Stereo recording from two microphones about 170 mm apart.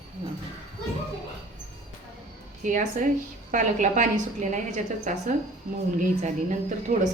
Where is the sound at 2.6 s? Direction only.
50° right (ahead or behind).